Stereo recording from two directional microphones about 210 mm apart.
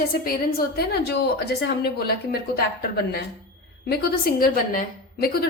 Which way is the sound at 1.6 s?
50° left (ahead or behind).